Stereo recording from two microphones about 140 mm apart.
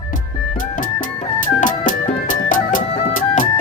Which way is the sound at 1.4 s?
70° left (ahead or behind).